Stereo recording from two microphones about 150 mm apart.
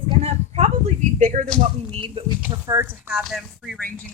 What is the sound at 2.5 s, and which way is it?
Speech, 20° right (ahead or behind).